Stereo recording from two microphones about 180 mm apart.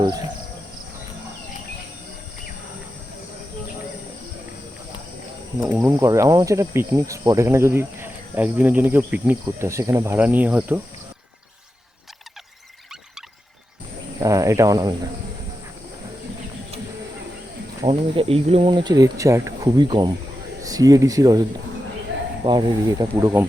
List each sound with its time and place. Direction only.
5.6 s speech: 10° right (ahead or behind)
14.2 s speech: 20° right (ahead or behind)
17.8 s speech: 30° right (ahead or behind)
22.4 s speech: 20° right (ahead or behind)